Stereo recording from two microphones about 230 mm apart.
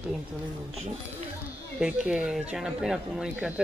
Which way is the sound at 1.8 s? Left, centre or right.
Centre.